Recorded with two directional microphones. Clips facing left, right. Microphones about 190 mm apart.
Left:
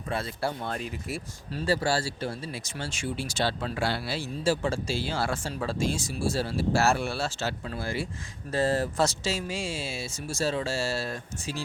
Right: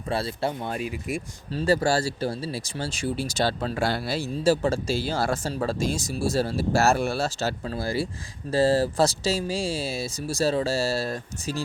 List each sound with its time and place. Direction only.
0.1 s speech: 30° right (ahead or behind)
0.6 s speech: 10° right (ahead or behind)
1.6 s speech: 45° right (ahead or behind)